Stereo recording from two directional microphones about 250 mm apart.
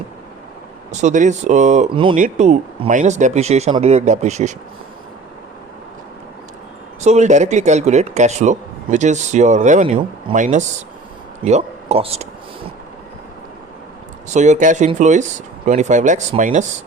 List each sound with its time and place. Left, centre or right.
0.9 s speech: right
7.0 s speech: right
14.3 s speech: right